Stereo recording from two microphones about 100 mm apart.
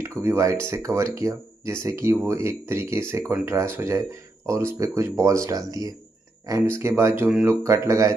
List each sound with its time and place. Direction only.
0.0 s speech: 25° right (ahead or behind)